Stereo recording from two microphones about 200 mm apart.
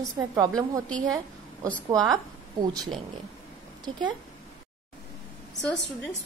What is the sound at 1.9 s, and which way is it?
Speech, 20° right (ahead or behind).